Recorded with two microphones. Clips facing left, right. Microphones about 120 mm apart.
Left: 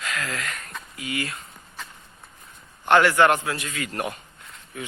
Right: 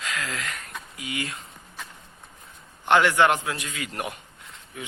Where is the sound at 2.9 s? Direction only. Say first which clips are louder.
Left 2 dB; 15° right (ahead or behind).